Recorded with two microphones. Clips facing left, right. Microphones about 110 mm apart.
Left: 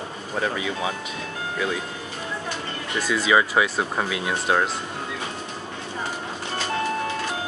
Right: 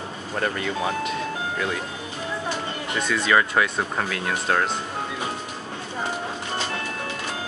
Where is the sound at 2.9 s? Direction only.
5° left (ahead or behind).